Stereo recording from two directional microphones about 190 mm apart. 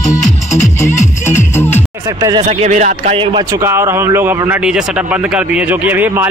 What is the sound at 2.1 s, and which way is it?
Speech, 20° right (ahead or behind).